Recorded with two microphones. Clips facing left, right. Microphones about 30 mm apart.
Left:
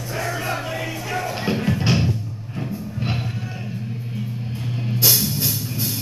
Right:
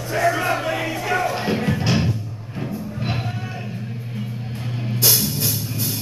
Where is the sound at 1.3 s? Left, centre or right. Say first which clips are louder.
Right 1 dB; centre.